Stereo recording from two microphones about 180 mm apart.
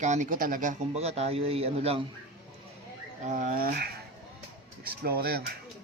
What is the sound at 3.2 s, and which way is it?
Speech, 45° right (ahead or behind).